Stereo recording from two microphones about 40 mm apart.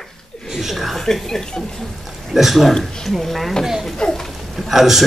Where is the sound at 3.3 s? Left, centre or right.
Centre.